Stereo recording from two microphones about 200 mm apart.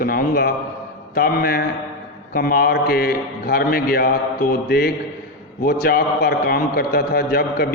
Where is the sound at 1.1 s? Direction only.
50° left (ahead or behind).